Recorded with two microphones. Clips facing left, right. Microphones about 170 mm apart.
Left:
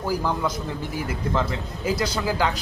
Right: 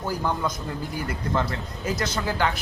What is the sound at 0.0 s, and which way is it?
A man's voice, 5° left (ahead or behind).